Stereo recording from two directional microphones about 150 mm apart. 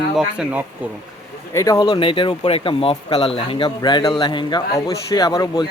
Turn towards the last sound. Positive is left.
turn(degrees=25)  # may be behind; listen again after turning